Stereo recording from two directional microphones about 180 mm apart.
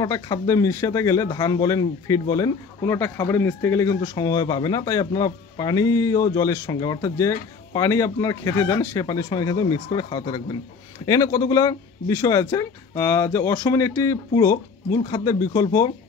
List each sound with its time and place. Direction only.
0.0 s speech: 20° left (ahead or behind)